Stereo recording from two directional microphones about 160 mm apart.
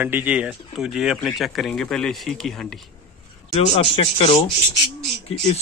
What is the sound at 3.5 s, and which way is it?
Speech, 40° left (ahead or behind).